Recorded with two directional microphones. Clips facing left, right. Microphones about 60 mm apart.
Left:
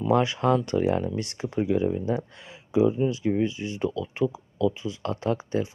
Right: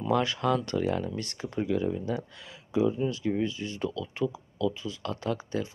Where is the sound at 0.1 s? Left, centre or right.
Left.